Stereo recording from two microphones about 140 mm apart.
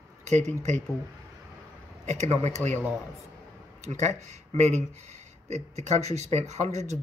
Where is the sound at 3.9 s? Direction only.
55° right (ahead or behind).